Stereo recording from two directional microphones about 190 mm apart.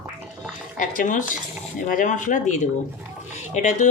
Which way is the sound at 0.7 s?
45° left (ahead or behind).